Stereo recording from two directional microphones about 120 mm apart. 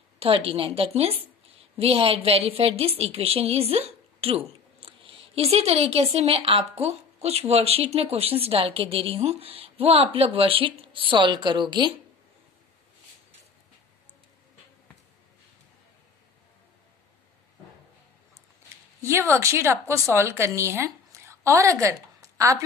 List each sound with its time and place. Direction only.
0.2 s a woman's voice: 50° right (ahead or behind)
19.0 s a woman's voice: 20° right (ahead or behind)
22.2 s a sound: 25° right (ahead or behind)